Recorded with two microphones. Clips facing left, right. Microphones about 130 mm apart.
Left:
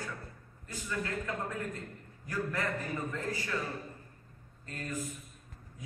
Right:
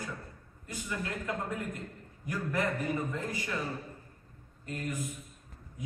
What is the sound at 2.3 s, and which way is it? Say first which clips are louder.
Speech: right 2 dB; 20° right (ahead or behind).